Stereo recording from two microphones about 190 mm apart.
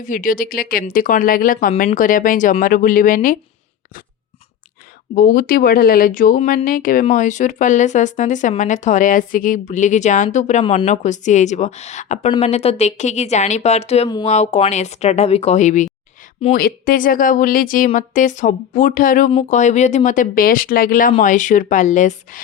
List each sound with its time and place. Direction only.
0.0 s speech: 45° left (ahead or behind)
5.1 s speech: 45° left (ahead or behind)